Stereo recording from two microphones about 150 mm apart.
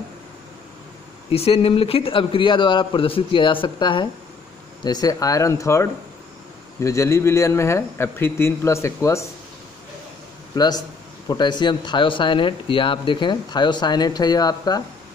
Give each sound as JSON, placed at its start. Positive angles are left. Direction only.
{"t": 1.3, "sound": "a man's voice", "side_deg": 40}
{"t": 10.5, "sound": "a man's voice", "side_deg": 25}